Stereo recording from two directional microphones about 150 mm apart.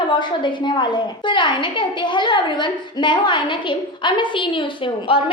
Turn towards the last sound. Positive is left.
turn(degrees=35)  # may be behind; listen again after turning